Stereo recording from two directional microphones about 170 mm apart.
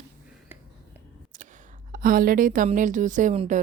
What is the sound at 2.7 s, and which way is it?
Speech, 45° right (ahead or behind).